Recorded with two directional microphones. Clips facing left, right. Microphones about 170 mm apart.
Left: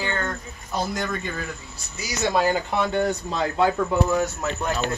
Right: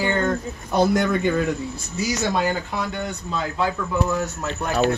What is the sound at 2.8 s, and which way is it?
Speech, 35° left (ahead or behind).